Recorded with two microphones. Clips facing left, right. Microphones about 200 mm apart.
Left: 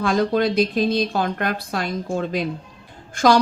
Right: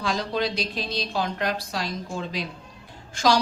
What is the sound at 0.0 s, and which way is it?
A woman's voice, 50° left (ahead or behind).